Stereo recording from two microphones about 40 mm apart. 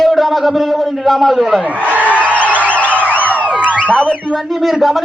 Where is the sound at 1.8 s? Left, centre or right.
Right.